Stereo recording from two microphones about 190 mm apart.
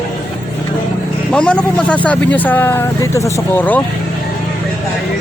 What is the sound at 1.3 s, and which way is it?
Speech, 5° left (ahead or behind).